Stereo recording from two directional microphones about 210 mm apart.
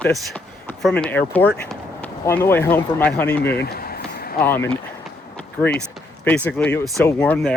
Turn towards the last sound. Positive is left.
turn(degrees=5)  # may be behind; listen again after turning